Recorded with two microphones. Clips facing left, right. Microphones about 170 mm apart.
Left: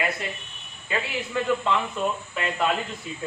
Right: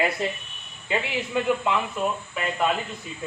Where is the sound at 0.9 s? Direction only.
20° right (ahead or behind).